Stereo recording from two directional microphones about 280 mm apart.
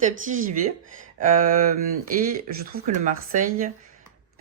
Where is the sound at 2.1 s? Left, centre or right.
Right.